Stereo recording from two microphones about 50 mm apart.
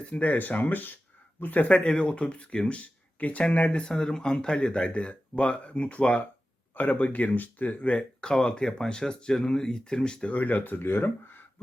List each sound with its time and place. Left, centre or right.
0.0 s speech: left
1.7 s speech: centre
6.7 s speech: left
8.2 s speech: centre
10.2 s speech: left